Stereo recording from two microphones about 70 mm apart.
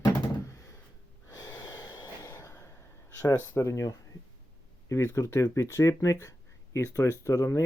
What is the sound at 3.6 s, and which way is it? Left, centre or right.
Speech, left.